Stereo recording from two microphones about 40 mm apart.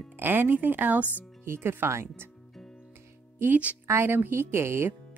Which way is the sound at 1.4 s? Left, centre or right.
Right.